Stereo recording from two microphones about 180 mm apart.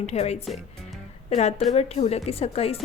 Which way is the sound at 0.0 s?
35° left (ahead or behind).